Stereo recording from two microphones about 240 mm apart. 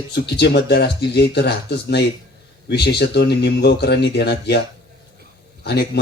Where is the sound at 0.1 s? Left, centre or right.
Left.